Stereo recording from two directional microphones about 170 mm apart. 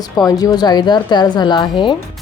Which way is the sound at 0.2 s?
20° left (ahead or behind).